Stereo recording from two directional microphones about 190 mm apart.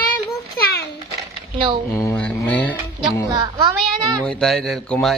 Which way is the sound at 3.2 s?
20° right (ahead or behind).